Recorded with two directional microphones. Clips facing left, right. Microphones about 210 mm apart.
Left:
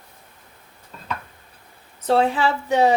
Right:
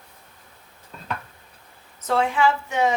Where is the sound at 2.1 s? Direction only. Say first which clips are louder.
Left 2 dB; 35° left (ahead or behind).